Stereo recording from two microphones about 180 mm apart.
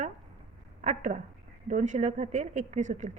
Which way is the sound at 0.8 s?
40° right (ahead or behind).